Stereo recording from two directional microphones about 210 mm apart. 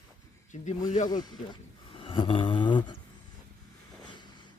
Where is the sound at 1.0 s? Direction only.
20° left (ahead or behind).